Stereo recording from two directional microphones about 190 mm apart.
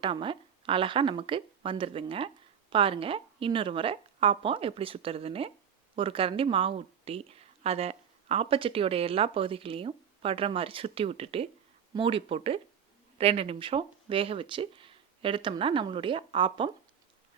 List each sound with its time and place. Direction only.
0.0 s speech: 25° right (ahead or behind)